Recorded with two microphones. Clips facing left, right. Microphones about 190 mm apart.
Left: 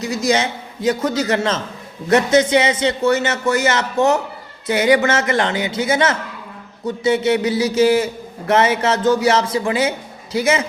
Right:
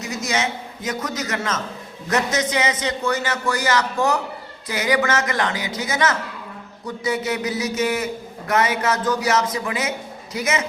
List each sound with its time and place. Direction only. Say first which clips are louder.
0.0 s a man's voice: left 6 dB; 30° left (ahead or behind)